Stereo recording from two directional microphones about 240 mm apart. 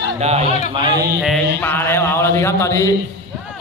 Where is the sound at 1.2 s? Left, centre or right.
Centre.